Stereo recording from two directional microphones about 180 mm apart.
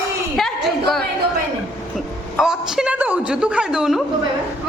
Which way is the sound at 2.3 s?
5° right (ahead or behind).